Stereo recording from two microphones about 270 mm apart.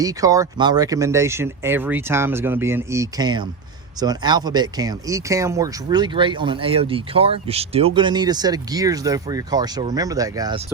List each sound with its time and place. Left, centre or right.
0.0 s speech: centre